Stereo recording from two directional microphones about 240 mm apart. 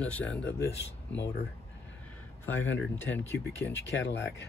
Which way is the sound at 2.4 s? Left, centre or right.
Left.